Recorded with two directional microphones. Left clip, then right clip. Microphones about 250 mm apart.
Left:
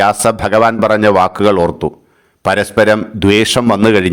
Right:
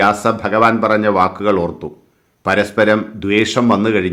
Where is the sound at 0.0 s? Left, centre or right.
Left.